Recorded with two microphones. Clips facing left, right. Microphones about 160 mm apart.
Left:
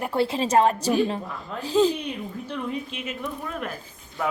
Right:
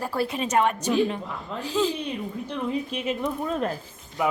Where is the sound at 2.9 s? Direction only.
35° right (ahead or behind).